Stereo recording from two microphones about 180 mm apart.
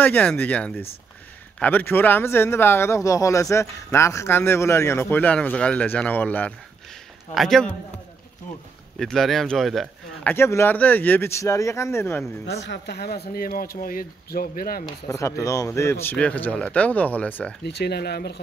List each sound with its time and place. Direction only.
0.0 s a man's voice: 10° left (ahead or behind)
8.9 s speech: centre (ahead or behind)
10.3 s speech: 15° left (ahead or behind)
12.6 s speech: 70° left (ahead or behind); by 14.9 s 50° left (ahead or behind)
15.0 s speech: 15° left (ahead or behind)
17.6 s speech: 65° left (ahead or behind)